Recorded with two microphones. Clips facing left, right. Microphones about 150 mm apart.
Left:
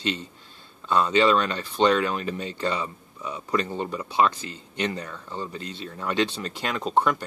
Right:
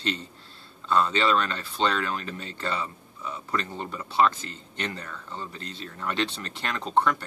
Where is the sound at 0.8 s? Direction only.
15° left (ahead or behind).